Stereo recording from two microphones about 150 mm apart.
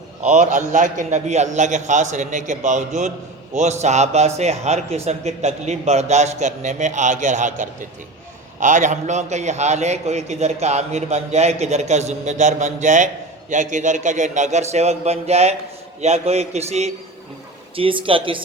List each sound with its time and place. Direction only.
0.2 s a man's voice: 55° right (ahead or behind); by 18.4 s 35° right (ahead or behind)